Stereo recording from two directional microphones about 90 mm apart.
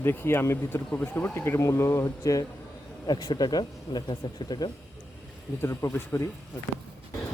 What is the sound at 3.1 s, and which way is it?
Speech, 50° left (ahead or behind).